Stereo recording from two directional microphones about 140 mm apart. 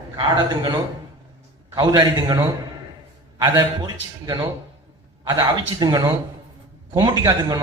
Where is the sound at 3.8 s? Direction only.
30° right (ahead or behind).